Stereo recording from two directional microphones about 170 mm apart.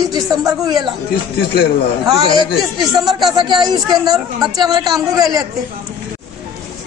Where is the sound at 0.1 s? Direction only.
20° right (ahead or behind).